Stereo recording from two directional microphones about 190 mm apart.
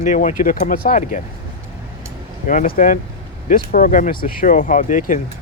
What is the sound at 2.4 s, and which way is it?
Speech, 45° left (ahead or behind).